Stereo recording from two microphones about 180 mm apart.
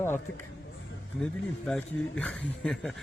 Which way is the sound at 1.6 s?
5° left (ahead or behind).